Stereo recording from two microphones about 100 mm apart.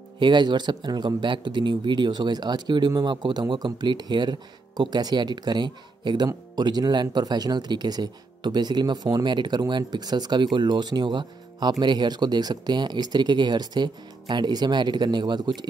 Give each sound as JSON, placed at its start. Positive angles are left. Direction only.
{"t": 0.2, "sound": "a man's voice", "side_deg": -50}